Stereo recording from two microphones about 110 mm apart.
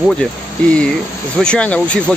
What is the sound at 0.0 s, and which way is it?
Speech, 5° left (ahead or behind).